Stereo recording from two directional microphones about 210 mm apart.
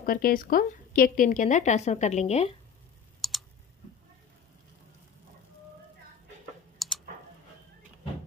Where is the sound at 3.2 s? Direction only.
Centre (ahead or behind).